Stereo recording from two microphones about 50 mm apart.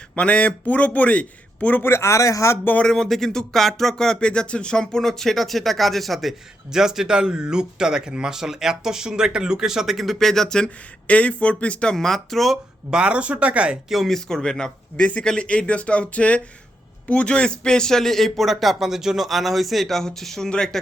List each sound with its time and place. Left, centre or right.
0.2 s a man's voice: left
1.8 s a man's voice: left
2.8 s speech: centre
6.7 s speech: centre
10.2 s speech: centre
11.0 s a man's voice: left
11.9 s speech: centre
12.9 s speech: right
13.9 s speech: centre
14.3 s speech: centre
14.9 s a man's voice: left; by 20.5 s centre